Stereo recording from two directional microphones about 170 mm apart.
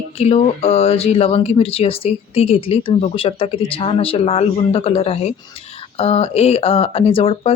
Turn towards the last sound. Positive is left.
turn(degrees=35)  # may be behind; listen again after turning